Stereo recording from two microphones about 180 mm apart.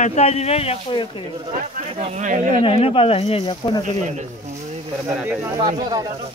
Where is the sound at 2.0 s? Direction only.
35° right (ahead or behind).